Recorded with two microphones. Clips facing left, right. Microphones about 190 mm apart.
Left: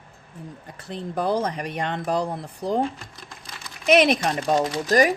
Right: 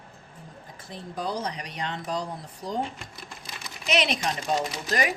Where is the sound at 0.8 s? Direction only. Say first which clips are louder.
Left 7 dB; 60° left (ahead or behind).